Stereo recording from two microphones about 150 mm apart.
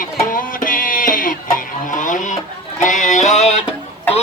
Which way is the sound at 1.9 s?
60° left (ahead or behind).